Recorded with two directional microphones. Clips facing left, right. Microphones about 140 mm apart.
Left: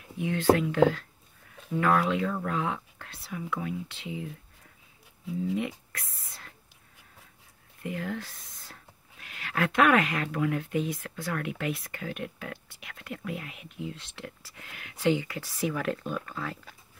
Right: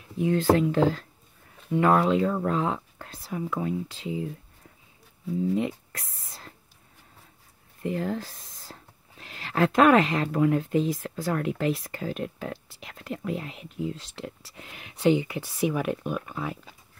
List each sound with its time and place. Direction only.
0.2 s speech: 35° right (ahead or behind)
5.9 s a sound: 35° right (ahead or behind)
7.8 s speech: 30° right (ahead or behind); by 16.7 s 15° right (ahead or behind)